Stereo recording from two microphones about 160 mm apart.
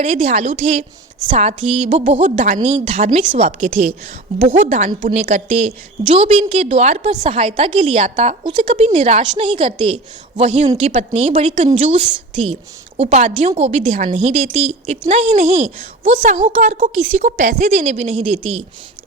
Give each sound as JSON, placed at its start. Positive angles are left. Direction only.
{"t": 0.0, "sound": "a woman's voice", "side_deg": -45}
{"t": 2.4, "sound": "a woman's voice", "side_deg": -55}
{"t": 2.6, "sound": "a woman's voice", "side_deg": -40}
{"t": 8.1, "sound": "a woman's voice", "side_deg": -45}
{"t": 8.4, "sound": "a woman's voice", "side_deg": -30}
{"t": 9.3, "sound": "a woman's voice", "side_deg": -35}
{"t": 15.4, "sound": "a woman's voice", "side_deg": -40}